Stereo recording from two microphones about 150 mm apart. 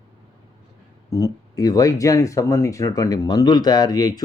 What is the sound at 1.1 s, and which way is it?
Speech, 25° left (ahead or behind).